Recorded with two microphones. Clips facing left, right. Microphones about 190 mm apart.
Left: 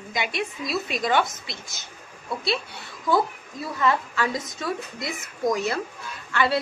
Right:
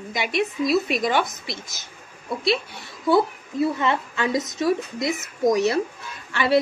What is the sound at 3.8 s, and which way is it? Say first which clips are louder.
A woman's voice: even; 25° right (ahead or behind).